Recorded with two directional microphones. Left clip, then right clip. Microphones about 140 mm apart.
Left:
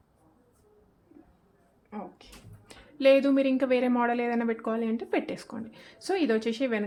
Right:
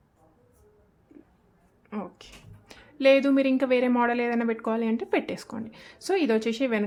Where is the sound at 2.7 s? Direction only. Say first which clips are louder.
Right 1 dB; 10° right (ahead or behind).